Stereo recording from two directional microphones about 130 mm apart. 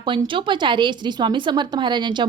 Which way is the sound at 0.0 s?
40° right (ahead or behind).